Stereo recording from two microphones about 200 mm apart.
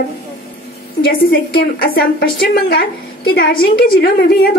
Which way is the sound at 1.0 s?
50° left (ahead or behind).